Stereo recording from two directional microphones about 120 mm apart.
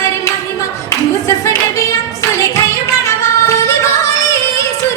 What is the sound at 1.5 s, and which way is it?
Singing, 25° left (ahead or behind).